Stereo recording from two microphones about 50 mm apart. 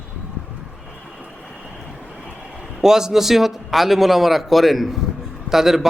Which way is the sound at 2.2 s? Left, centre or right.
Centre.